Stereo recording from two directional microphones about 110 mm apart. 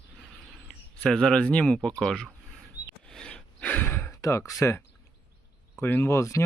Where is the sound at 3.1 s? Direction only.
10° left (ahead or behind); by 4.9 s 25° left (ahead or behind).